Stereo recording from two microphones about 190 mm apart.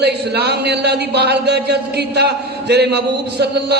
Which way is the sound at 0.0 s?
60° right (ahead or behind).